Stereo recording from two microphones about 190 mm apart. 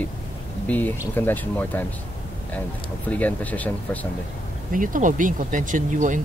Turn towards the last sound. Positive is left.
turn(degrees=-40)  # may be behind; listen again after turning